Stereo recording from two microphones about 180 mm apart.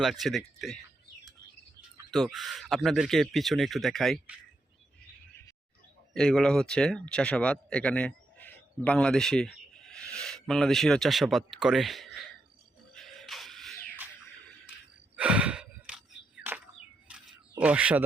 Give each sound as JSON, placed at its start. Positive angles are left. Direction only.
{"t": 0.0, "sound": "speech", "side_deg": 0}
{"t": 2.1, "sound": "speech", "side_deg": 0}
{"t": 6.1, "sound": "speech", "side_deg": 5}
{"t": 12.9, "sound": "music", "side_deg": 0}
{"t": 15.1, "sound": "gasp", "side_deg": -5}
{"t": 17.1, "sound": "a sound", "side_deg": -5}
{"t": 17.6, "sound": "speech", "side_deg": -10}